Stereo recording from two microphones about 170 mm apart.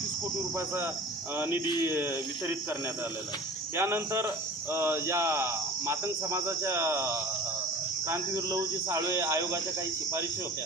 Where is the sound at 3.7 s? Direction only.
15° right (ahead or behind).